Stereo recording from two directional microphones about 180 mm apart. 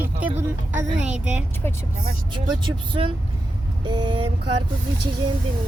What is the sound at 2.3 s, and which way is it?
Speech, 25° right (ahead or behind).